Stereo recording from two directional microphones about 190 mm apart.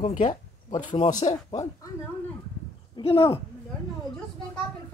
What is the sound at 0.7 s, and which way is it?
Speech, 30° left (ahead or behind).